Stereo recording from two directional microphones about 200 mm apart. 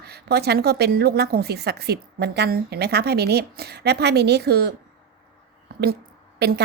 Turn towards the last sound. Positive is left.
turn(degrees=-55)  # may be behind; listen again after turning